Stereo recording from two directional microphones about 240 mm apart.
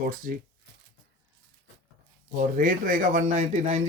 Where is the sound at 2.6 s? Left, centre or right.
Right.